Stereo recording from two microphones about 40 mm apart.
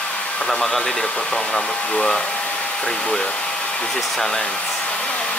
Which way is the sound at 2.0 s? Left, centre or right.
Left.